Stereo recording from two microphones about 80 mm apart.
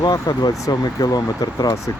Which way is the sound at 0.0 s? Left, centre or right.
Left.